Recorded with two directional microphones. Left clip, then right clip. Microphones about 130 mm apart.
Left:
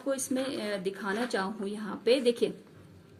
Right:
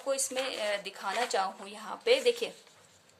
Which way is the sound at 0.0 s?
25° right (ahead or behind).